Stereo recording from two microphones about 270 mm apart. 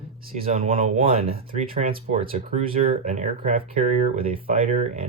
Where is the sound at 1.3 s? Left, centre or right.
Right.